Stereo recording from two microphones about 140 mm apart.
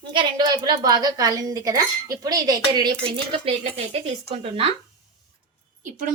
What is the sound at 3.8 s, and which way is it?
Speech, 55° right (ahead or behind).